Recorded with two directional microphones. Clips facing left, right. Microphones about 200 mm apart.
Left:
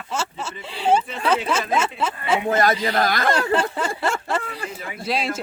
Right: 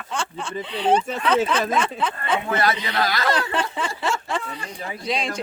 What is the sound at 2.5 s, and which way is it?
Speech, 45° left (ahead or behind).